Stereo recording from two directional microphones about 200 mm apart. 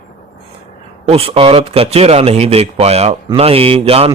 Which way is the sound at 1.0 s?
30° right (ahead or behind).